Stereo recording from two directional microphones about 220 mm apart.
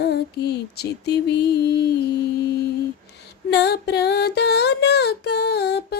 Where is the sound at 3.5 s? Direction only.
50° left (ahead or behind).